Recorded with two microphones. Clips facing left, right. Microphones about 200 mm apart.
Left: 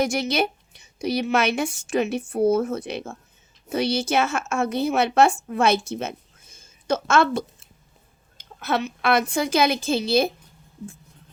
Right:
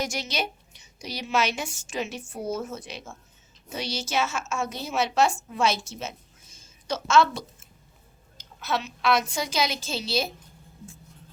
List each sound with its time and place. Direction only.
0.0 s a woman's voice: 60° left (ahead or behind)